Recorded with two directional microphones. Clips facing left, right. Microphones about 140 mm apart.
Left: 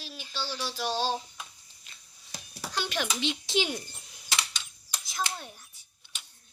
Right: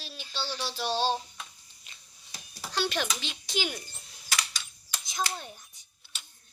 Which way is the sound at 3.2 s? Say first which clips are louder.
Left 5 dB; 25° left (ahead or behind).